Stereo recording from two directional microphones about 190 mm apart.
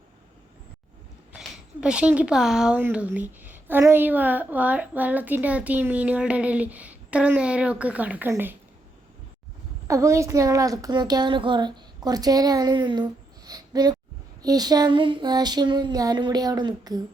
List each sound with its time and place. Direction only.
1.3 s speech: 5° right (ahead or behind)
9.8 s a woman's voice: 15° right (ahead or behind)
14.4 s a sound: 20° right (ahead or behind)